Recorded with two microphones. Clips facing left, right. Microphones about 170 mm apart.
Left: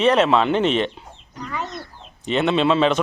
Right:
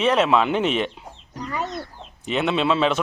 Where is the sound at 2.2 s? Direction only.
5° right (ahead or behind).